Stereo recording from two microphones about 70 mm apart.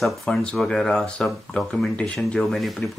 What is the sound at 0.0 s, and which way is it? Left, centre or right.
Speech, centre.